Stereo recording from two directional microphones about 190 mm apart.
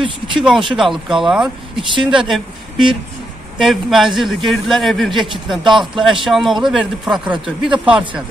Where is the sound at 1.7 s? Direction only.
25° right (ahead or behind).